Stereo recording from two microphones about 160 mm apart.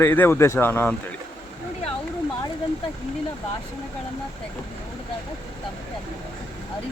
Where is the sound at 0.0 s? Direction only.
15° left (ahead or behind).